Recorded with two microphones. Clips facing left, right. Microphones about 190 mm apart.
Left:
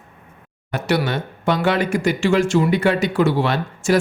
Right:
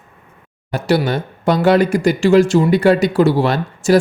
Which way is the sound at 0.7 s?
35° right (ahead or behind).